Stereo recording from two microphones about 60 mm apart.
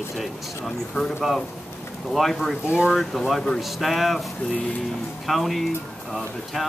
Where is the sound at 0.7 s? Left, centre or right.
Centre.